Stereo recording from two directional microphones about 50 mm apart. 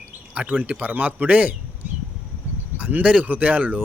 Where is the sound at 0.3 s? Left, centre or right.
Right.